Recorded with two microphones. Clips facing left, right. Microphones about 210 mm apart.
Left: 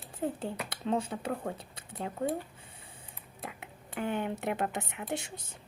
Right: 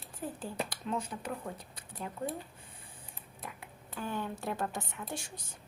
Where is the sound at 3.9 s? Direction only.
65° left (ahead or behind).